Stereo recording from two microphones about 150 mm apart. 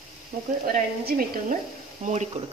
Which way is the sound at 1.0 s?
75° right (ahead or behind).